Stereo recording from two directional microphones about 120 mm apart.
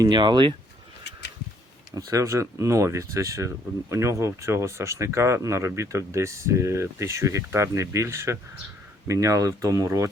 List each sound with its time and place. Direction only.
0.0 s speech: 40° right (ahead or behind)
2.0 s speech: 25° right (ahead or behind)